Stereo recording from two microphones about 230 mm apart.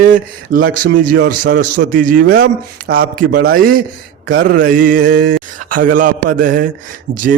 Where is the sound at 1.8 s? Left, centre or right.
Right.